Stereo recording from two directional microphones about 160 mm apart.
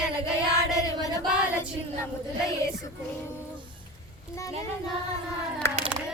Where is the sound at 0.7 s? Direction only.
20° left (ahead or behind).